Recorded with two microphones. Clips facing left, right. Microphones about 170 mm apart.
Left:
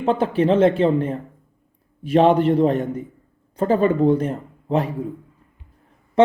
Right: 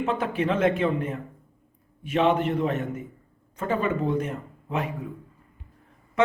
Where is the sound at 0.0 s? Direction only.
30° left (ahead or behind).